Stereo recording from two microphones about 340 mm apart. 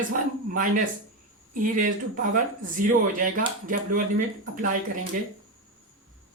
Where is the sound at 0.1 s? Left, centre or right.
Right.